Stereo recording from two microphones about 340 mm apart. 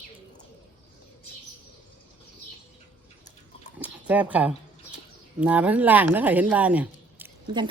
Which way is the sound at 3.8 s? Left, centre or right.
Centre.